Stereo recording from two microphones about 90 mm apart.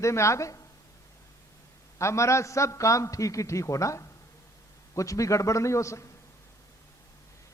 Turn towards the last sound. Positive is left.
turn(degrees=35)  # may be behind; listen again after turning